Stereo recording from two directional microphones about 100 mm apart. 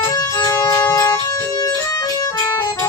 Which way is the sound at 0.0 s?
40° left (ahead or behind).